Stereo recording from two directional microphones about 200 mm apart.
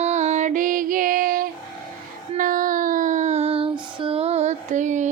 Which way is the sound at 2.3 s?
45° right (ahead or behind).